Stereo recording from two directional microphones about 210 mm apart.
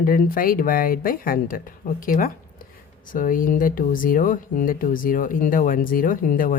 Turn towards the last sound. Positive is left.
turn(degrees=40)  # may be behind; listen again after turning